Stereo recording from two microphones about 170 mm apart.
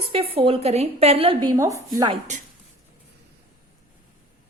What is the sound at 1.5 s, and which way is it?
Speech, 20° right (ahead or behind).